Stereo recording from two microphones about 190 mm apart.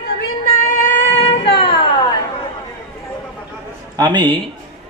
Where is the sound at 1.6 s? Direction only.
25° left (ahead or behind).